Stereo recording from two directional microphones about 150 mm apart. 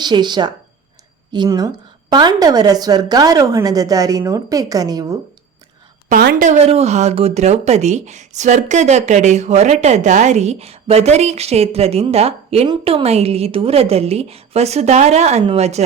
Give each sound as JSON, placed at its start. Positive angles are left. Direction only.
{"t": 0.0, "sound": "a woman's voice", "side_deg": -30}
{"t": 6.1, "sound": "speech", "side_deg": -65}